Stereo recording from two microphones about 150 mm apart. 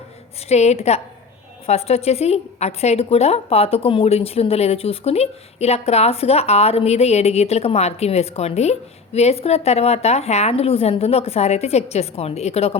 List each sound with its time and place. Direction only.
0.4 s a woman's voice: 45° left (ahead or behind)